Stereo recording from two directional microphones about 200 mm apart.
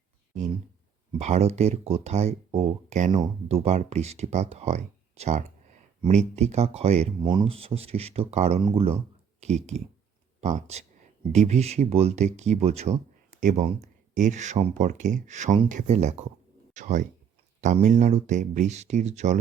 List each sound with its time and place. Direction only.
1.2 s speech: 35° right (ahead or behind)